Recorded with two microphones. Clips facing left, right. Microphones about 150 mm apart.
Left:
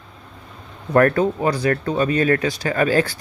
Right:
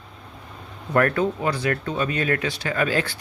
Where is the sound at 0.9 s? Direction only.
35° left (ahead or behind).